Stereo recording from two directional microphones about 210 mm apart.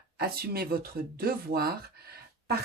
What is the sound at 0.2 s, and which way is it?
Speech, 50° right (ahead or behind).